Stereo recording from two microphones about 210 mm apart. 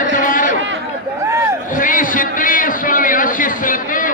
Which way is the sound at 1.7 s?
40° left (ahead or behind).